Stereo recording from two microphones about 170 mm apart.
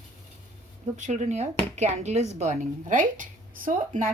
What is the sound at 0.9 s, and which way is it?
A woman's voice, 45° right (ahead or behind).